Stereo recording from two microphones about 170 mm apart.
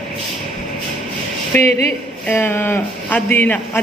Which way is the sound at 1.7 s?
40° right (ahead or behind).